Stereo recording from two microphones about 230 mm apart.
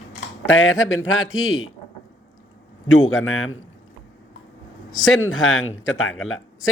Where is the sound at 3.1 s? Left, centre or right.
Left.